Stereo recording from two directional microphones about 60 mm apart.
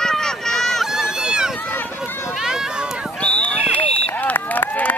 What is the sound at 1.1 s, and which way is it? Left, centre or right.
Run, centre.